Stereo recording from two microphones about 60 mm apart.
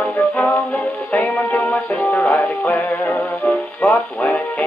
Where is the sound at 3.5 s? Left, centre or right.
Centre.